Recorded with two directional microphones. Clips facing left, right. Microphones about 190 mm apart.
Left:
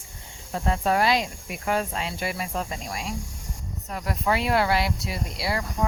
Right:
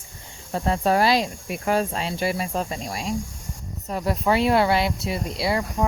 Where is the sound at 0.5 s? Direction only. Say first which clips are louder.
Right 3 dB; 35° right (ahead or behind).